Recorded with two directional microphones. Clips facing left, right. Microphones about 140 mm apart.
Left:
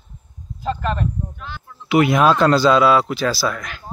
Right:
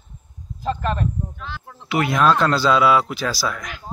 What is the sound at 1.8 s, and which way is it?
Speech, 15° left (ahead or behind).